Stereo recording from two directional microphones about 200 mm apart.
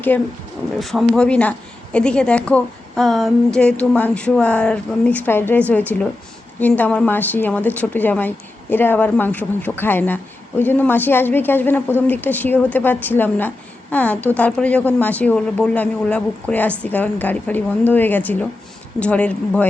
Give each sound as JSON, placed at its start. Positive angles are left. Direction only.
{"t": 0.1, "sound": "a woman's voice", "side_deg": 5}